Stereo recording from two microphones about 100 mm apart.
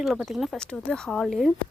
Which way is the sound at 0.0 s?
Centre (ahead or behind).